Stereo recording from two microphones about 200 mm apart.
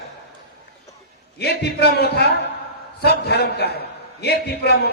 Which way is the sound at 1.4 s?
55° left (ahead or behind).